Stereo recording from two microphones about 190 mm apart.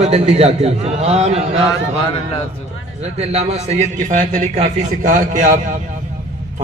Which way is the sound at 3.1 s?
35° right (ahead or behind).